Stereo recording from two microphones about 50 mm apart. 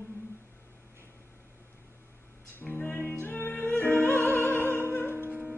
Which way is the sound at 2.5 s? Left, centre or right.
Left.